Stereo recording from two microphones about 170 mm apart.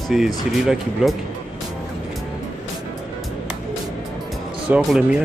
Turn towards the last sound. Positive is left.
turn(degrees=-5)  # may be behind; listen again after turning